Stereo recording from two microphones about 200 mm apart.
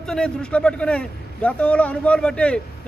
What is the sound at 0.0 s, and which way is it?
A man's voice, 5° left (ahead or behind).